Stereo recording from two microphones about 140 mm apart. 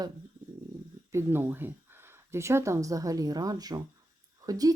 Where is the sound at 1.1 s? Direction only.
20° right (ahead or behind).